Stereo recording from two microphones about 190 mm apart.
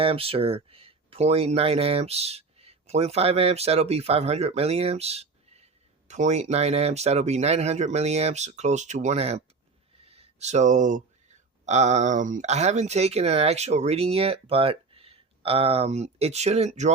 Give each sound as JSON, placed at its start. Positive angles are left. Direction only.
{"t": 0.0, "sound": "speech", "side_deg": -30}